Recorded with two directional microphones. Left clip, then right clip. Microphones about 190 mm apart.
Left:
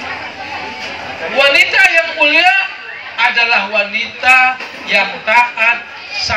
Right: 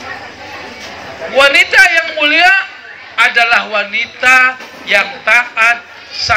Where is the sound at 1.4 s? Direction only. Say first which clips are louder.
Right 2 dB; 60° right (ahead or behind).